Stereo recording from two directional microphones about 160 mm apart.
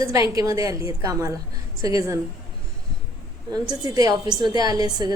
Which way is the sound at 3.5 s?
25° right (ahead or behind).